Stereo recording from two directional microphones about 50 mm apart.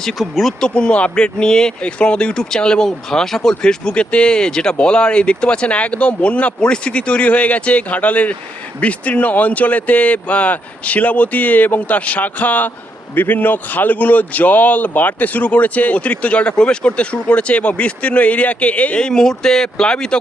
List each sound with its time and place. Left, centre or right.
0.2 s speech: centre
0.6 s speech: left
19.0 s speech: centre